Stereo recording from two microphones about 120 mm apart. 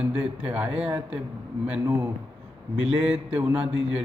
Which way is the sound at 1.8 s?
25° right (ahead or behind).